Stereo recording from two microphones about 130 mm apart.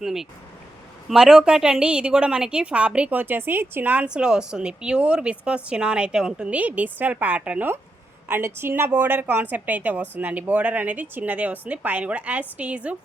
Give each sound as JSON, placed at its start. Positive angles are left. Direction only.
{"t": 0.0, "sound": "a woman's voice", "side_deg": -5}